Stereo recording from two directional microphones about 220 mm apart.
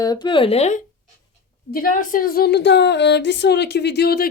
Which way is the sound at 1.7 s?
40° left (ahead or behind).